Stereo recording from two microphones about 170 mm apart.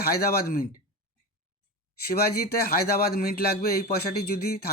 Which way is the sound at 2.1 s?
65° left (ahead or behind).